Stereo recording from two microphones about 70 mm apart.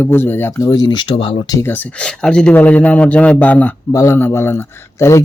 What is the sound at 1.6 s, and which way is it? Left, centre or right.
Speech, left.